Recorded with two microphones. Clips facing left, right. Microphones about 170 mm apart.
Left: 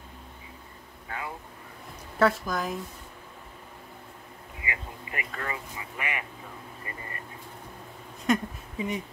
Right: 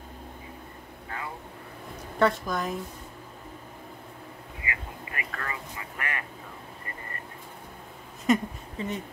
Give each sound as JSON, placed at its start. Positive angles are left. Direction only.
{"t": 2.1, "sound": "speech", "side_deg": 0}
{"t": 4.6, "sound": "a sound", "side_deg": 20}
{"t": 8.3, "sound": "speech", "side_deg": 0}
{"t": 8.7, "sound": "speech", "side_deg": 15}